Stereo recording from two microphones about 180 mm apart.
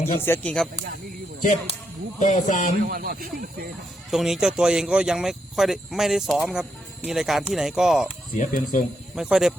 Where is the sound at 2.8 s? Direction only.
55° right (ahead or behind).